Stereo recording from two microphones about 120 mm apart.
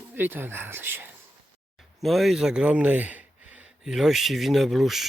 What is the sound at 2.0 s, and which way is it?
Speech, centre (ahead or behind).